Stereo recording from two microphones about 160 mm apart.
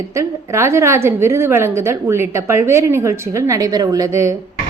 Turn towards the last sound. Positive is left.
turn(degrees=-20)  # may be behind; listen again after turning